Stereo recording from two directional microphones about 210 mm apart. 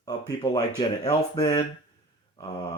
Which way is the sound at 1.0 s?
20° left (ahead or behind).